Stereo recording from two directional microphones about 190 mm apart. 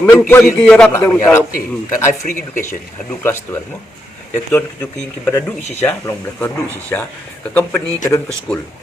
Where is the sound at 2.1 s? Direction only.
45° left (ahead or behind).